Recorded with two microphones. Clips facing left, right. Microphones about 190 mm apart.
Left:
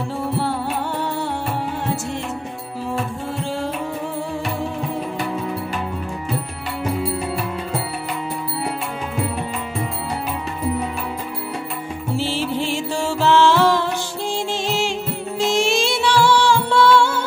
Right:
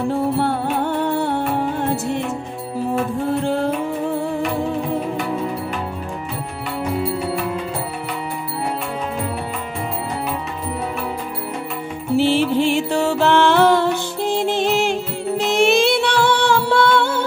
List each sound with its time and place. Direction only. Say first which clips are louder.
1.0 s music: right 5 dB; 55° right (ahead or behind)
3.4 s music: right 3 dB; 55° right (ahead or behind)
12.2 s music: right 7 dB; 65° right (ahead or behind)